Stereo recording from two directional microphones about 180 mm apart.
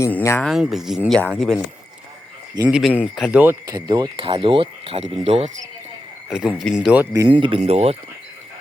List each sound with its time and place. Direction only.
0.0 s speech: 15° left (ahead or behind)
0.4 s speech: centre (ahead or behind)
2.6 s speech: 5° right (ahead or behind)
3.8 s speech: 25° right (ahead or behind)
6.2 s speech: 5° right (ahead or behind)
7.3 s speech: 30° right (ahead or behind)